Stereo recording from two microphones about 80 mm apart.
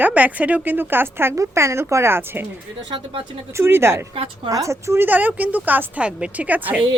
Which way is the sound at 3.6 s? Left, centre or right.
Right.